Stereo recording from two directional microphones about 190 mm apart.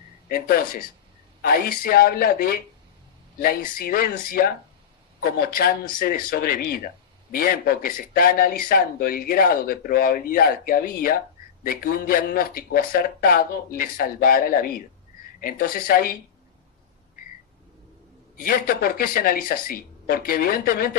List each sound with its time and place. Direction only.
0.3 s speech: 50° left (ahead or behind)
18.4 s speech: 50° left (ahead or behind)